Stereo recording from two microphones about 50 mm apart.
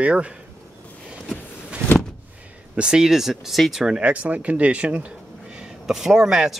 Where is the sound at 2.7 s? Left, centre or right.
Centre.